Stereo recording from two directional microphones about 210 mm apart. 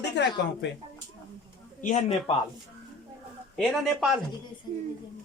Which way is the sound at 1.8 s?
30° left (ahead or behind).